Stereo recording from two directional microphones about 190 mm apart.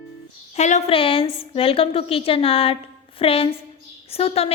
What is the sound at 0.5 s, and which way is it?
A woman's voice, 35° left (ahead or behind).